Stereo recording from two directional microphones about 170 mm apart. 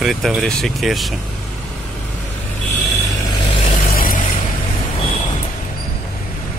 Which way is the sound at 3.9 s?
55° left (ahead or behind).